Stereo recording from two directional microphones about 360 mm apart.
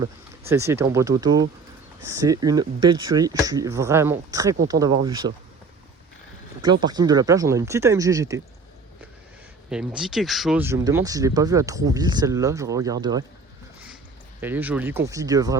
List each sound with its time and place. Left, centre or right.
0.0 s speech: centre
6.8 s speech: centre
9.6 s speech: centre
14.4 s speech: centre